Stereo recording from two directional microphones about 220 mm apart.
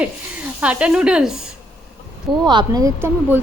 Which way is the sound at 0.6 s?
5° right (ahead or behind).